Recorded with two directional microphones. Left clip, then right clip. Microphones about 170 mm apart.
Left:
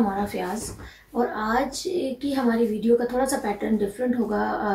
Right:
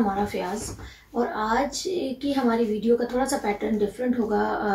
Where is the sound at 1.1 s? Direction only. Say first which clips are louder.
Even; 15° left (ahead or behind).